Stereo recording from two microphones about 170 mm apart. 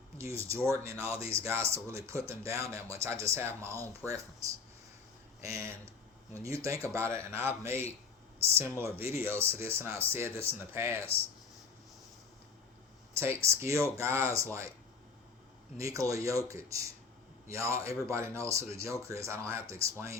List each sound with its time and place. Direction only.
0.2 s speech: 15° right (ahead or behind)
5.4 s speech: 20° right (ahead or behind)
13.1 s speech: 15° right (ahead or behind)
15.8 s speech: 20° right (ahead or behind)